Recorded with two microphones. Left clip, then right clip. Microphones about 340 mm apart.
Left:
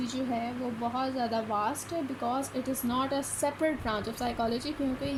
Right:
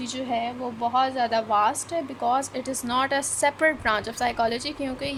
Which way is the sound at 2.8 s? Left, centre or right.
Right.